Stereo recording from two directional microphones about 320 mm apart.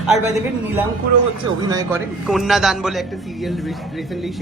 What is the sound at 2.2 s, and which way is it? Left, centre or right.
A man's voice, centre.